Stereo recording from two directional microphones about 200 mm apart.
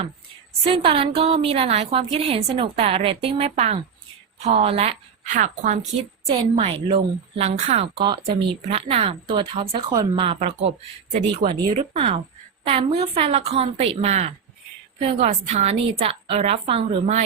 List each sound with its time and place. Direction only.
0.6 s a woman's voice: 25° right (ahead or behind)
6.2 s a woman's voice: 30° right (ahead or behind)
11.7 s a woman's voice: 35° right (ahead or behind)